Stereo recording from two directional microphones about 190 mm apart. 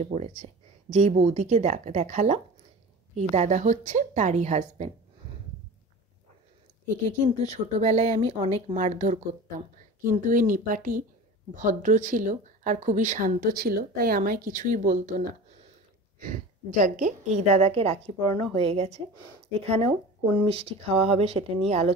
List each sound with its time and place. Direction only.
0.0 s a woman's voice: 40° right (ahead or behind)
7.4 s a woman's voice: 35° right (ahead or behind)
20.3 s a woman's voice: 30° right (ahead or behind)